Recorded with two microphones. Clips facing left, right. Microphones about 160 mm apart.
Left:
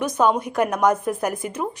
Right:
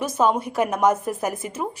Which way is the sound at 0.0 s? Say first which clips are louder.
Left 1 dB; 5° right (ahead or behind).